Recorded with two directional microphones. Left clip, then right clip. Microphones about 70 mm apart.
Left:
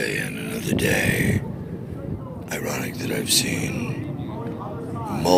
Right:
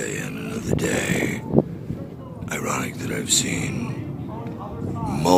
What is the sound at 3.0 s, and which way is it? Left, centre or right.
Speech, right.